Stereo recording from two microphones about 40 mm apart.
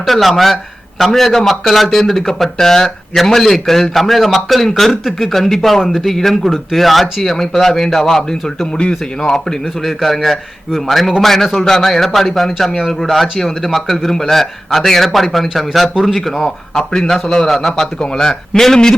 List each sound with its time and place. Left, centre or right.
0.0 s speech: centre
10.0 s speech: centre
16.4 s speech: centre
18.0 s speech: centre